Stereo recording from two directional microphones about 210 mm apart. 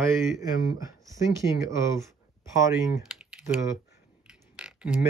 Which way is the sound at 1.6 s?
15° right (ahead or behind).